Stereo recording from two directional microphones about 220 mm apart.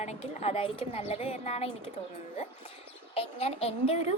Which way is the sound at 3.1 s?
30° left (ahead or behind).